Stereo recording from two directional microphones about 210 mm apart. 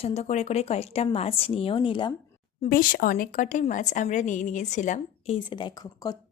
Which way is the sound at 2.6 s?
40° left (ahead or behind).